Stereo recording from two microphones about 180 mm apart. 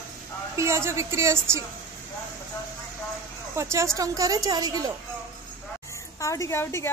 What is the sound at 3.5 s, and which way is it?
A woman's voice, 15° right (ahead or behind).